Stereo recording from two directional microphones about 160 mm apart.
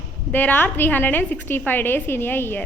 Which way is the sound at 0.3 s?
10° left (ahead or behind).